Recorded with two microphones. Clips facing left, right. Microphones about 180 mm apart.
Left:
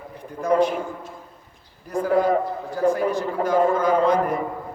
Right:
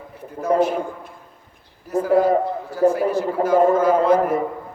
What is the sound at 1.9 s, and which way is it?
A man's voice, 5° right (ahead or behind).